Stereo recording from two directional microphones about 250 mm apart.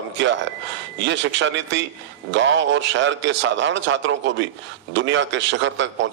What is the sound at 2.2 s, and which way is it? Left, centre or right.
A man's voice, right.